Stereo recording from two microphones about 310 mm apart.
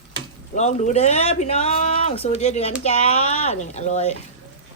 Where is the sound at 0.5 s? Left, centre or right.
Left.